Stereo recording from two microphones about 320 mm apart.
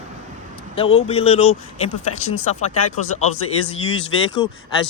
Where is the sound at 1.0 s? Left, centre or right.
Centre.